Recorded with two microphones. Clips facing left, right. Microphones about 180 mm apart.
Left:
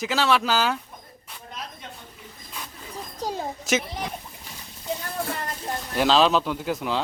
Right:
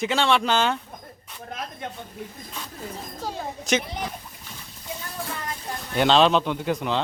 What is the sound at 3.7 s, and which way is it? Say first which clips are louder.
Speech: right 1 dB; 5° left (ahead or behind).